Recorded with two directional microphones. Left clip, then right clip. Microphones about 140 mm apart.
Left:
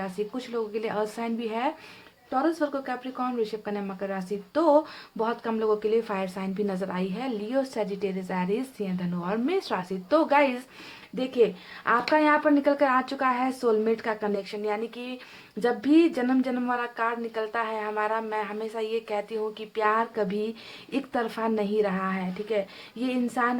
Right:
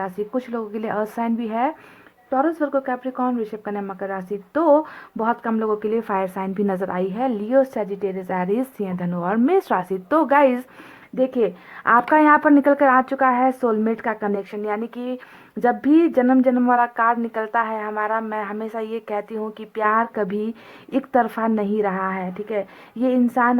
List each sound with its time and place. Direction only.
0.0 s speech: 35° right (ahead or behind)
11.2 s speech: 35° right (ahead or behind)